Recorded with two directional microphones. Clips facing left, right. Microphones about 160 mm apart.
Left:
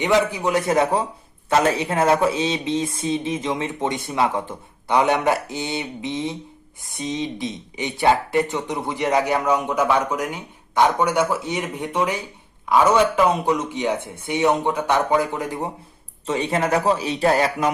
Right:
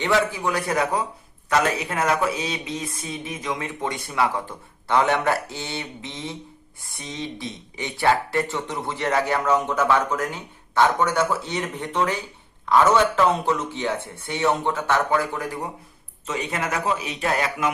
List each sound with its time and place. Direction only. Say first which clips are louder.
0.0 s a man's voice: left 3 dB; 20° left (ahead or behind)